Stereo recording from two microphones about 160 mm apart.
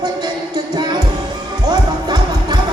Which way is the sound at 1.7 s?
25° right (ahead or behind).